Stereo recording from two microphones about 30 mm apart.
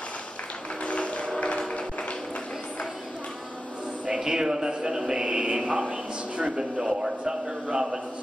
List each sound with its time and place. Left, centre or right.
0.8 s music: left
4.1 s a man's voice: right
5.3 s speech: right
6.5 s a man's voice: right